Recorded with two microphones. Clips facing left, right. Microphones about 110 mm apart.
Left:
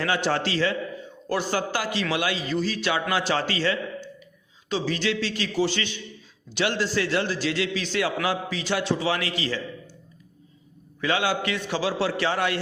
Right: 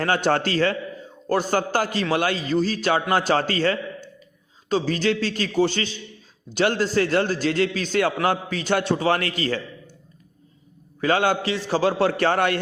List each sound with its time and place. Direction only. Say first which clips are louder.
0.0 s a man's voice: right 4 dB; 45° right (ahead or behind)
11.0 s a man's voice: right 4 dB; 45° right (ahead or behind)
11.4 s a man's voice: right 4 dB; 30° right (ahead or behind)
11.8 s a man's voice: right 6 dB; 50° right (ahead or behind)